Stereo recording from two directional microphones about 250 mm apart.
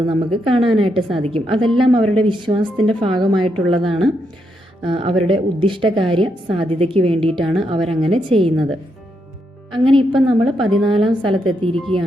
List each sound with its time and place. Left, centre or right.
0.0 s a woman's voice: centre
9.7 s a woman's voice: centre
11.7 s speech: centre